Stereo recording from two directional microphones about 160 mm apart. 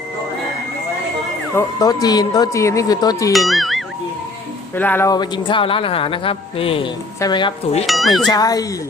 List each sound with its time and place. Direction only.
1.5 s speech: 25° left (ahead or behind)
3.3 s speech: centre (ahead or behind)
4.7 s speech: 10° left (ahead or behind)
5.1 s a man's voice: 25° left (ahead or behind)
7.9 s speech: centre (ahead or behind)
8.3 s speech: 25° left (ahead or behind)